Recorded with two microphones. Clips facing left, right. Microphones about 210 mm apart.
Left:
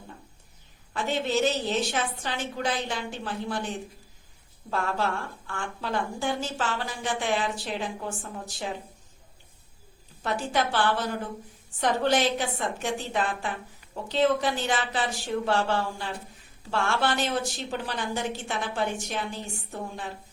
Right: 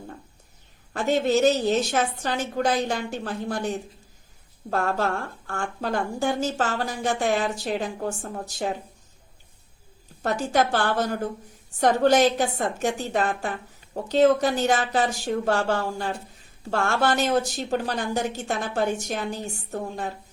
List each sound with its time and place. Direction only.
0.9 s a woman's voice: 45° right (ahead or behind)
10.2 s a woman's voice: 45° right (ahead or behind)